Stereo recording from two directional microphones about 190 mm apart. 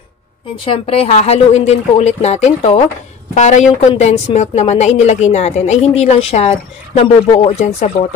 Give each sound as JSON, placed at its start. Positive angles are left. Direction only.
{"t": 0.7, "sound": "a woman's voice", "side_deg": 30}